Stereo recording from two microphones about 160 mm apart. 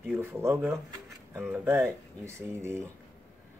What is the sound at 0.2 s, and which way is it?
Speech, 15° right (ahead or behind).